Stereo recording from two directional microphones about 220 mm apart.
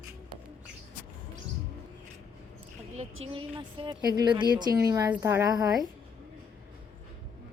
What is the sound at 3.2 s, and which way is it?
A woman's voice, 25° right (ahead or behind).